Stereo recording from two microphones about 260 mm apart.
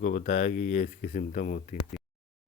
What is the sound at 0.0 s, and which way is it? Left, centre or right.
Speech, left.